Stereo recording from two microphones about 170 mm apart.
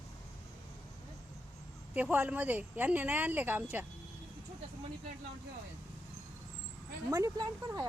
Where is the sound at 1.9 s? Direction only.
10° right (ahead or behind).